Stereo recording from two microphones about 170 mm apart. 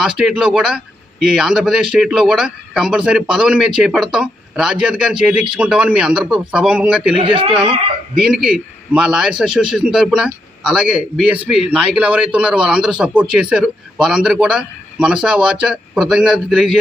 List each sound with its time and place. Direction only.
0.0 s speech: 5° right (ahead or behind)
7.1 s speech: 30° right (ahead or behind)
8.1 s speech: 5° right (ahead or behind)